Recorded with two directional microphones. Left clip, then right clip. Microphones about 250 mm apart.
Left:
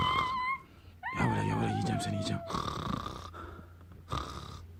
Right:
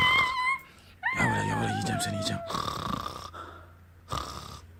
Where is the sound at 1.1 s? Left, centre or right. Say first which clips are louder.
Right 5 dB; centre.